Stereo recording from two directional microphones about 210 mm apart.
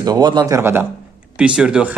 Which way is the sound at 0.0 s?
20° right (ahead or behind).